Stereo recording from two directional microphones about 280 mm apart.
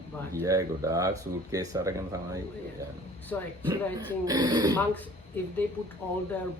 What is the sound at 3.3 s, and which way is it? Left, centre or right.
Speech, centre.